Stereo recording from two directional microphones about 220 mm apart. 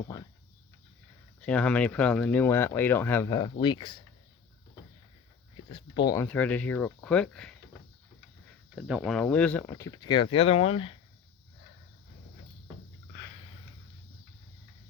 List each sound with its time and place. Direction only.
1.4 s speech: 5° left (ahead or behind); by 4.0 s 20° left (ahead or behind)
5.6 s speech: 25° left (ahead or behind)
6.2 s speech: 5° left (ahead or behind)
8.7 s speech: centre (ahead or behind); by 10.9 s 25° left (ahead or behind)